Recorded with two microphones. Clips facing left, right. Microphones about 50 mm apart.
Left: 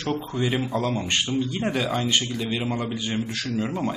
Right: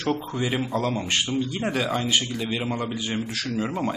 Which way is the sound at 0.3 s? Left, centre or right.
Centre.